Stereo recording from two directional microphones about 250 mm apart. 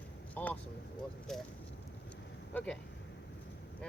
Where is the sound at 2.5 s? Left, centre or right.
Centre.